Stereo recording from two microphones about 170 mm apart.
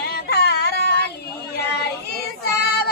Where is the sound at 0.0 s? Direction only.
70° left (ahead or behind).